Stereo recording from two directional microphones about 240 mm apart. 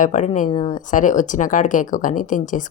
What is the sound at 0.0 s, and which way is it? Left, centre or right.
Speech, left.